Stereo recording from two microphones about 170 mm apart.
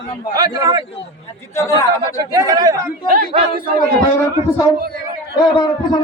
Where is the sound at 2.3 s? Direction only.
20° right (ahead or behind).